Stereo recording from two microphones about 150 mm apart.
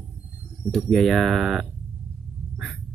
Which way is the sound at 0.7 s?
Centre (ahead or behind).